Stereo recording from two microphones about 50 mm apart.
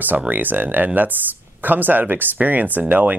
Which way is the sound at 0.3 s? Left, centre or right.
Right.